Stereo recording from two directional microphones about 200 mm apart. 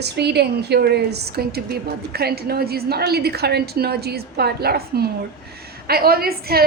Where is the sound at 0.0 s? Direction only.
55° right (ahead or behind).